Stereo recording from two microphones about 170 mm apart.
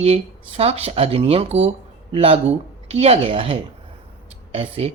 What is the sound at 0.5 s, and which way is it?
Speech, 35° right (ahead or behind).